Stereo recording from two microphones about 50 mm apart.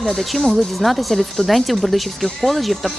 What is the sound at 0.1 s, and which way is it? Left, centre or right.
Speech, centre.